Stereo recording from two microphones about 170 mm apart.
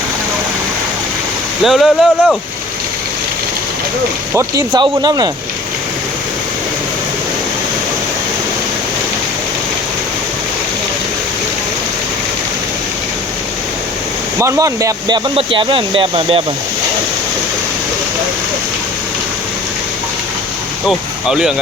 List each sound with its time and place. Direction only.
1.6 s speech: centre (ahead or behind)
4.7 s speech: 25° right (ahead or behind)
14.3 s speech: 15° right (ahead or behind)
20.8 s speech: 5° right (ahead or behind)